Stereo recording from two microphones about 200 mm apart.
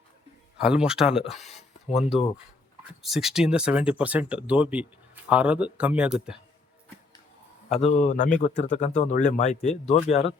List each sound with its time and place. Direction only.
0.6 s speech: 5° right (ahead or behind)
1.5 s a sound: 30° left (ahead or behind)
2.0 s speech: centre (ahead or behind)
7.9 s speech: 35° left (ahead or behind)